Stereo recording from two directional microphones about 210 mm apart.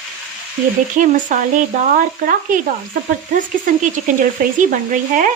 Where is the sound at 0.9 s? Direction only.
35° right (ahead or behind).